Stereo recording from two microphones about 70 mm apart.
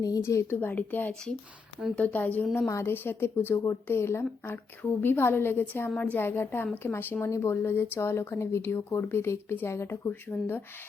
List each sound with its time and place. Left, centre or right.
0.0 s speech: left
0.6 s speech: left
2.6 s speech: left
2.9 s speech: left
4.5 s speech: left